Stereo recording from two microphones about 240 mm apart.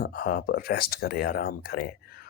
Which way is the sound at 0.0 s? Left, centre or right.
Left.